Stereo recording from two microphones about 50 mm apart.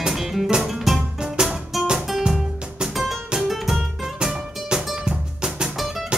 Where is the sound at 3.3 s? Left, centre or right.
Centre.